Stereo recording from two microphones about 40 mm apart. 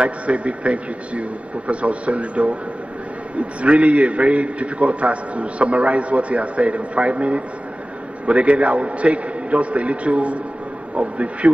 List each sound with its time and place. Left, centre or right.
0.0 s a man's voice: right